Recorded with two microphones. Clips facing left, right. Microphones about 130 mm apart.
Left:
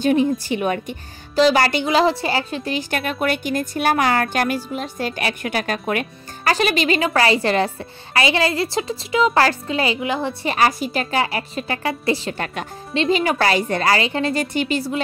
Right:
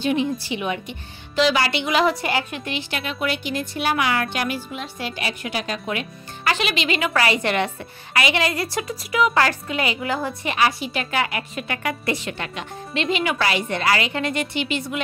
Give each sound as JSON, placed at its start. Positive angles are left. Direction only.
{"t": 0.0, "sound": "a woman's voice", "side_deg": 45}
{"t": 2.9, "sound": "a woman's voice", "side_deg": 50}
{"t": 10.4, "sound": "a woman's voice", "side_deg": 40}